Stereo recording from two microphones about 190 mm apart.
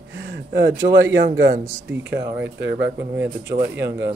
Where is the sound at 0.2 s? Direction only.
65° right (ahead or behind).